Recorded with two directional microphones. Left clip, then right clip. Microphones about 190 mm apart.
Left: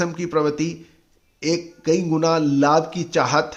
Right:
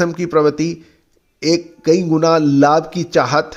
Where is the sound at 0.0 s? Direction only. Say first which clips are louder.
Right 7 dB; 30° right (ahead or behind).